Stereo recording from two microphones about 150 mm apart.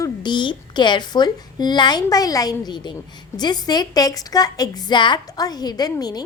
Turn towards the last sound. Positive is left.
turn(degrees=25)  # may be behind; listen again after turning